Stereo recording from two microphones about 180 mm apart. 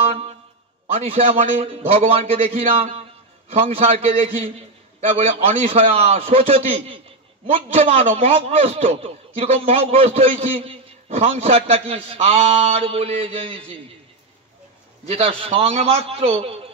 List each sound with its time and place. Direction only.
0.1 s a sound: 35° right (ahead or behind)
0.9 s a man's voice: 35° right (ahead or behind)
15.0 s a man's voice: 35° right (ahead or behind)